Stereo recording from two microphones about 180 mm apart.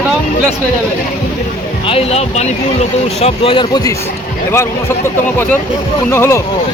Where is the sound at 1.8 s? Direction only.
30° left (ahead or behind).